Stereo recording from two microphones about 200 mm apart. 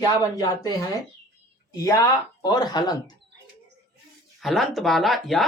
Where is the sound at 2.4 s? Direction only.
20° left (ahead or behind).